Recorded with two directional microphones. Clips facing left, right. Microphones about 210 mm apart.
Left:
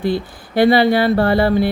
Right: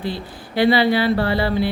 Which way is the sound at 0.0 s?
50° left (ahead or behind).